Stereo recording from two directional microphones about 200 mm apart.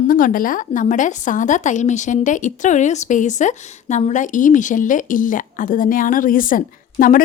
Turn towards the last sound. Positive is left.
turn(degrees=45)  # may be behind; listen again after turning